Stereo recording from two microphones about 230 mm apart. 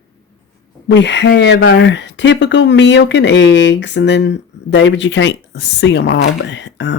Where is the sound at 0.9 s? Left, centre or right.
Left.